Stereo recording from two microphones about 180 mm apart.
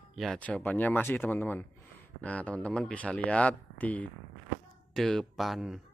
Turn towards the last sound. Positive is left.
turn(degrees=0)  # may be behind; listen again after turning